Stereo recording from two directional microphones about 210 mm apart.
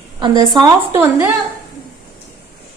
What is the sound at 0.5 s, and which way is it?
Speech, 15° right (ahead or behind).